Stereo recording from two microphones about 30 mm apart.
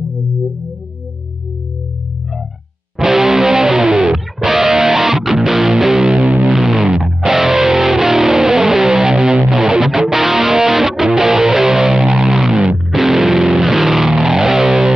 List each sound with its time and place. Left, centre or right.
3.0 s music: centre